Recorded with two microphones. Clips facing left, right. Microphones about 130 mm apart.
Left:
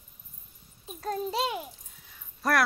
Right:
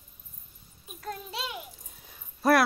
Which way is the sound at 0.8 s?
35° left (ahead or behind).